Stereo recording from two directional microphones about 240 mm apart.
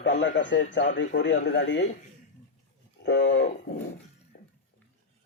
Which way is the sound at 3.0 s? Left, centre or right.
Left.